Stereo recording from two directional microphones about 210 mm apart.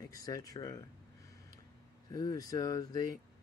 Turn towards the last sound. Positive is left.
turn(degrees=20)  # may be behind; listen again after turning